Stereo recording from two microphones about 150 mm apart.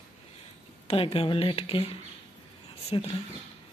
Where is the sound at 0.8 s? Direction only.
40° left (ahead or behind).